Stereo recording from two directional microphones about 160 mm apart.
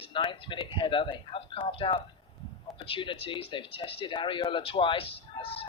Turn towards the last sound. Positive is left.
turn(degrees=35)  # may be behind; listen again after turning